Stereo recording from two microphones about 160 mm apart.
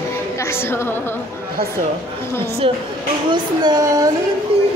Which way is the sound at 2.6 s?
35° right (ahead or behind).